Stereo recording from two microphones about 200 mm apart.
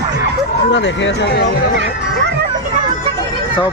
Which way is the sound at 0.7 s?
65° left (ahead or behind).